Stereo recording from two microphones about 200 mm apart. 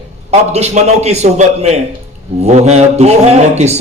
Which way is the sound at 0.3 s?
35° right (ahead or behind).